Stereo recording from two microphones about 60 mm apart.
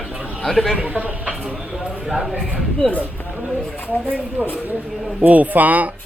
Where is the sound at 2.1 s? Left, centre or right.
Centre.